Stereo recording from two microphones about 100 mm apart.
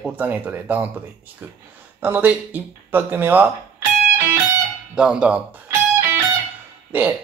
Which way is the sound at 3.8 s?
30° right (ahead or behind).